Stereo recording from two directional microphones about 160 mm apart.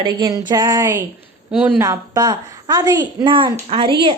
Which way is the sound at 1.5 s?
5° right (ahead or behind).